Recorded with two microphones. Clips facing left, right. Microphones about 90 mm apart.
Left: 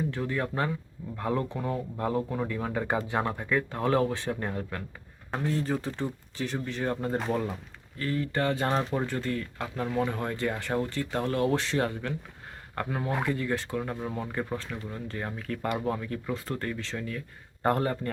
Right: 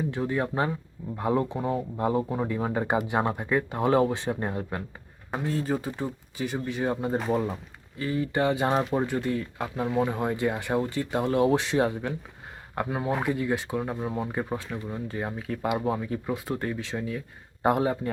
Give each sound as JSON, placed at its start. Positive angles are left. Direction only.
{"t": 0.1, "sound": "speech", "side_deg": -20}
{"t": 5.3, "sound": "speech", "side_deg": -5}